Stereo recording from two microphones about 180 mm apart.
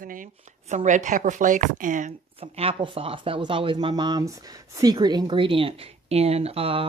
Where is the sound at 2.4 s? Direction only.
30° right (ahead or behind).